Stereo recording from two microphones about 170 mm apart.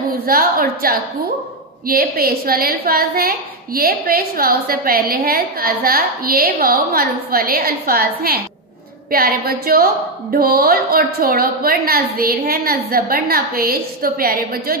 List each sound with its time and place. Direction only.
0.1 s a woman's voice: 60° right (ahead or behind)